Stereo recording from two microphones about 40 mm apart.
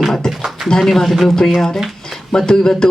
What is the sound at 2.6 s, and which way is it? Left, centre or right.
Speech, centre.